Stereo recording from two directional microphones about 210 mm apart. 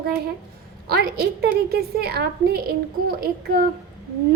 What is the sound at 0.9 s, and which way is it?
A woman's voice, 50° right (ahead or behind).